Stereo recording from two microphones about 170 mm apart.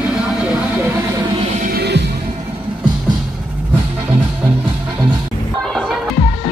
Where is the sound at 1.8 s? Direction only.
80° right.